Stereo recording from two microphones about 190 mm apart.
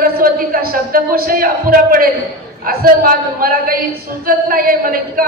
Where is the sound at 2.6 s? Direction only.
50° right (ahead or behind).